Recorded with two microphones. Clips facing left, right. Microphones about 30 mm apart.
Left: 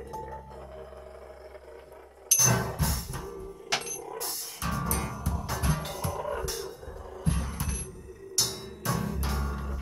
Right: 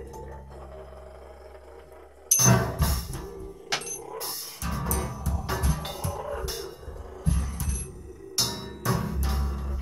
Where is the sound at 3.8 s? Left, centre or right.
Centre.